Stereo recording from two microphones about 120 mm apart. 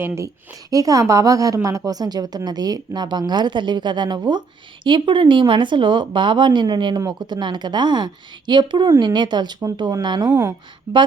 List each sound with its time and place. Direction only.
0.7 s a woman's voice: 30° right (ahead or behind)
10.2 s a woman's voice: 20° right (ahead or behind)